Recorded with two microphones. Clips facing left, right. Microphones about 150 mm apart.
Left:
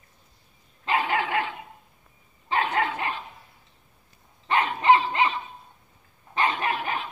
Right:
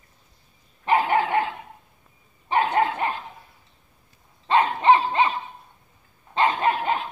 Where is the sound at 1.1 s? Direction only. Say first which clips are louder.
Right 5 dB; 35° right (ahead or behind).